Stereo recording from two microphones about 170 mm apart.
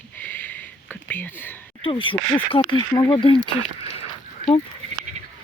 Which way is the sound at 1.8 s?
30° left (ahead or behind).